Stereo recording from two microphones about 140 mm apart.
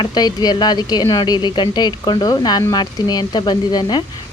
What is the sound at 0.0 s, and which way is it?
A woman's voice, 30° left (ahead or behind).